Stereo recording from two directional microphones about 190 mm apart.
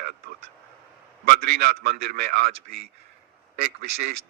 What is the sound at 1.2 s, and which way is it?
A man's voice, 55° right (ahead or behind).